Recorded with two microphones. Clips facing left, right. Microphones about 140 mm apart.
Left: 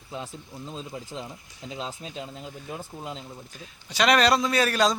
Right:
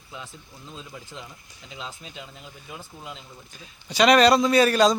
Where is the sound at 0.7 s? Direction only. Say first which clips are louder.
Left 4 dB; 35° left (ahead or behind).